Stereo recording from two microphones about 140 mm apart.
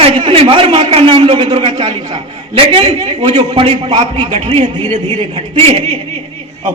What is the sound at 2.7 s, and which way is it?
A man's voice, 50° right (ahead or behind).